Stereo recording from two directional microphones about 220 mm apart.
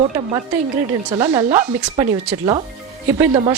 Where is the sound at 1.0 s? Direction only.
25° right (ahead or behind).